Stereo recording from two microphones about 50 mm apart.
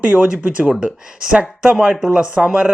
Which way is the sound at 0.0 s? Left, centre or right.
Right.